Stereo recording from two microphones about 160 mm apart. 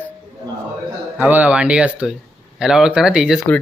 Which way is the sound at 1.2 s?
10° right (ahead or behind).